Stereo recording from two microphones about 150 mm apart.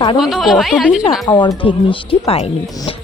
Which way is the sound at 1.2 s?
25° left (ahead or behind).